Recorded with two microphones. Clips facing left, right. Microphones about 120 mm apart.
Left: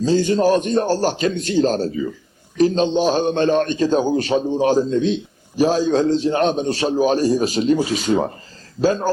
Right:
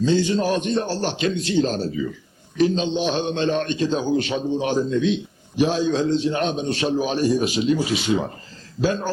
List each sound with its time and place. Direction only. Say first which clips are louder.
0.0 s a man's voice: left 4 dB; 40° left (ahead or behind)